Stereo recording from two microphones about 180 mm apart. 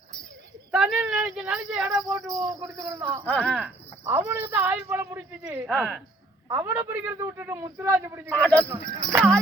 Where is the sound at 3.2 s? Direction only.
5° left (ahead or behind).